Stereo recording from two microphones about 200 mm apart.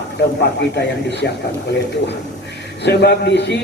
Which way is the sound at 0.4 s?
55° left (ahead or behind).